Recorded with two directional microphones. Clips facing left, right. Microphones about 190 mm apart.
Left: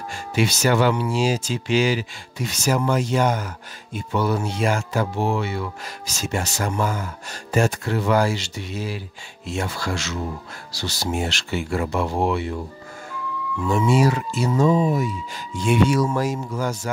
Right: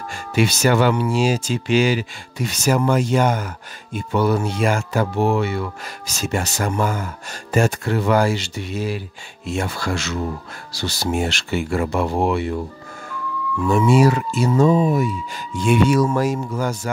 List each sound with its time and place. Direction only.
0.1 s speech: 55° right (ahead or behind)
13.7 s speech: 55° right (ahead or behind)